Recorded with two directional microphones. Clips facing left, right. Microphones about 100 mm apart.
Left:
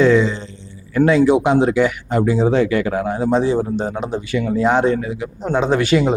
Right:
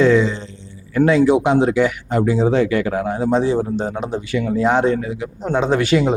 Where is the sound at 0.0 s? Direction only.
20° left (ahead or behind).